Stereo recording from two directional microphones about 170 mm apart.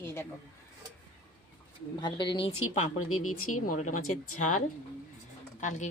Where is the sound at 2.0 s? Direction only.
25° left (ahead or behind).